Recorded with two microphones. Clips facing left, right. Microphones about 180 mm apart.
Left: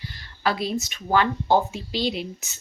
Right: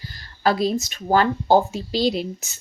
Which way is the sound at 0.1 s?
40° right (ahead or behind).